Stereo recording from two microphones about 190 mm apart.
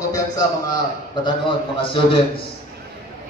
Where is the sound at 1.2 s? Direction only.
25° left (ahead or behind).